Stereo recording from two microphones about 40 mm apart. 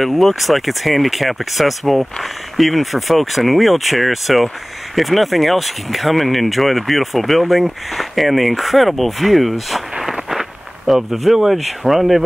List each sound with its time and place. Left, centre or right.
0.0 s speech: centre